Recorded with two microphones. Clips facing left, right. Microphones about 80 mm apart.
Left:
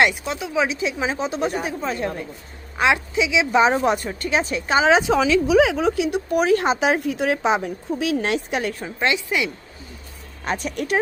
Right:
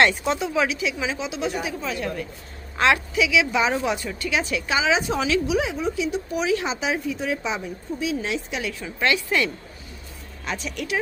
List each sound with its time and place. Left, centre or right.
0.3 s speech: centre
0.5 s speech: centre
0.8 s speech: left
2.7 s speech: centre; by 4.9 s left
4.9 s speech: left
5.6 s speech: left
9.0 s speech: left
10.4 s speech: left